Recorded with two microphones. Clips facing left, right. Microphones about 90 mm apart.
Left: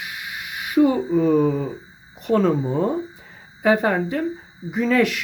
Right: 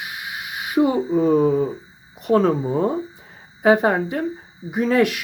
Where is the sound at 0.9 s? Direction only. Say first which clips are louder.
Right 1 dB; 25° right (ahead or behind).